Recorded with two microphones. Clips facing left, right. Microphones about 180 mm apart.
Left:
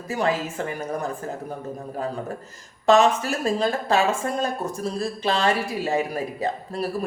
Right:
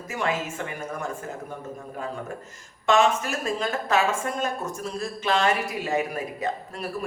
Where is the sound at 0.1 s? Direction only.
35° left (ahead or behind).